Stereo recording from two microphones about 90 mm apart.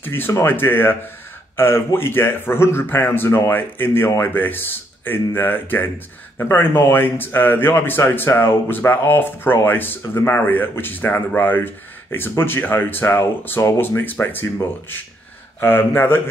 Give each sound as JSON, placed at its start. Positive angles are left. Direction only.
{"t": 0.0, "sound": "speech", "side_deg": 25}